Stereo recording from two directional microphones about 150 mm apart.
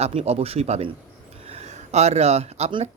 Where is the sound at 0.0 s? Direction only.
45° right (ahead or behind).